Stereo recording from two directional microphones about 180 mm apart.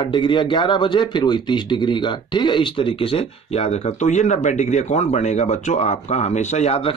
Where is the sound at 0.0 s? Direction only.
25° left (ahead or behind).